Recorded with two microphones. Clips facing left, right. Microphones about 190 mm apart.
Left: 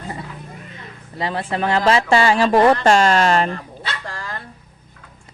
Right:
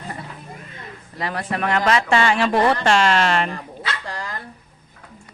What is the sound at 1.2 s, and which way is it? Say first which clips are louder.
Speech: left 2 dB; 25° left (ahead or behind).